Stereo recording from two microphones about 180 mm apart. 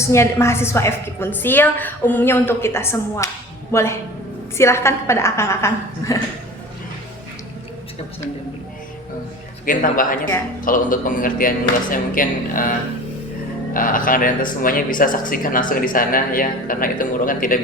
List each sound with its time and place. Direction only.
0.1 s a woman's voice: 15° left (ahead or behind)
9.6 s speech: 50° left (ahead or behind)
13.7 s speech: 50° left (ahead or behind)